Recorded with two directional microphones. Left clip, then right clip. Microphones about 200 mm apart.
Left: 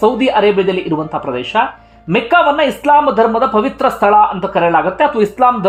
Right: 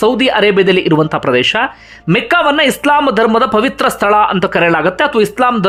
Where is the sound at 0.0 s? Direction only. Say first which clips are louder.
Right 1 dB; 20° right (ahead or behind).